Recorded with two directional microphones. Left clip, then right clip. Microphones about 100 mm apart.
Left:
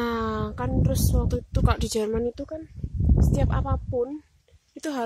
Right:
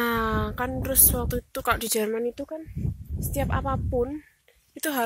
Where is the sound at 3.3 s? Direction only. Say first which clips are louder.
Right 7 dB; 15° left (ahead or behind).